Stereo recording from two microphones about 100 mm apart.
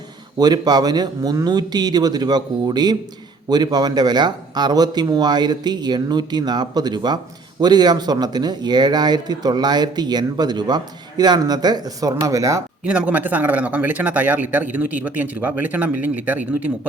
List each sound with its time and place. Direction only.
0.3 s speech: 40° right (ahead or behind)
12.8 s speech: 10° right (ahead or behind)